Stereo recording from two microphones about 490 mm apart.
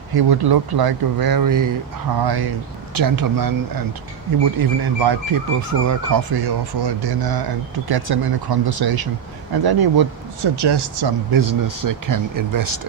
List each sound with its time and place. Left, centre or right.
0.1 s speech: right
4.5 s speech: right
5.5 s speech: right
6.3 s speech: right
11.3 s speech: right